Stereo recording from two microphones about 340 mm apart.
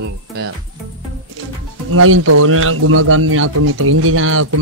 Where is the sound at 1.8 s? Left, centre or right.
Right.